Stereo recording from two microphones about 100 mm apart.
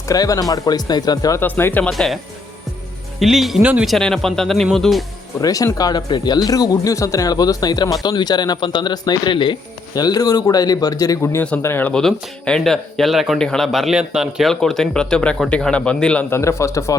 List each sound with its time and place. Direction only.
0.1 s speech: 40° left (ahead or behind)
1.4 s speech: 20° left (ahead or behind)
1.8 s speech: 5° left (ahead or behind)
3.2 s speech: centre (ahead or behind)
3.8 s speech: 5° left (ahead or behind)
5.4 s speech: 35° left (ahead or behind); by 9.6 s 55° left (ahead or behind)
9.9 s speech: 40° left (ahead or behind); by 11.9 s 20° left (ahead or behind)
11.9 s speech: 5° left (ahead or behind)
14.5 s a man's voice: 5° left (ahead or behind)
16.3 s speech: 30° left (ahead or behind)